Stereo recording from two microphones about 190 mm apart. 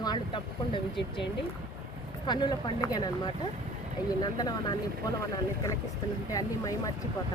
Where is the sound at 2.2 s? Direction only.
25° left (ahead or behind).